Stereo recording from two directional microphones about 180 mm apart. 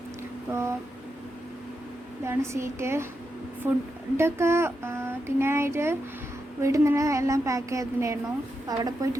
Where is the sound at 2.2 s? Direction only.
15° right (ahead or behind).